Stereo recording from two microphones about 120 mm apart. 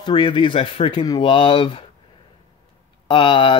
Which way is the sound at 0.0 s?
40° left (ahead or behind).